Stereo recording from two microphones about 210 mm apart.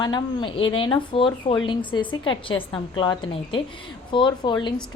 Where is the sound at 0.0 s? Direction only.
20° left (ahead or behind).